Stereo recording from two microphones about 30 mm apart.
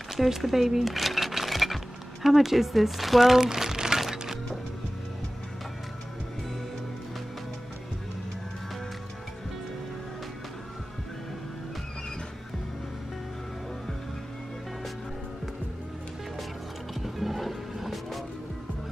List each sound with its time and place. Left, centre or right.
0.1 s a sound: centre
2.2 s speech: centre
3.7 s music: right
17.0 s music: centre